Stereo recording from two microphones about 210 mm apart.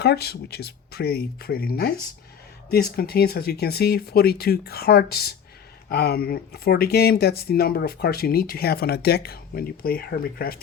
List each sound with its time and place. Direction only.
0.0 s speech: 50° left (ahead or behind)